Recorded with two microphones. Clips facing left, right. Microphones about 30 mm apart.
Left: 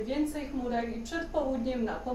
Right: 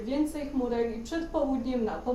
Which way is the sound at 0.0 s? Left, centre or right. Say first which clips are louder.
Right 2 dB; centre.